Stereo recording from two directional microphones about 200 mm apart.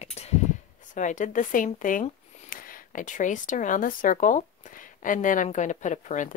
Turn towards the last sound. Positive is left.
turn(degrees=40)  # may be behind; listen again after turning